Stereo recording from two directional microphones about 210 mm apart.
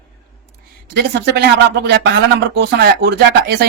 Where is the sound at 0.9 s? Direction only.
50° right (ahead or behind).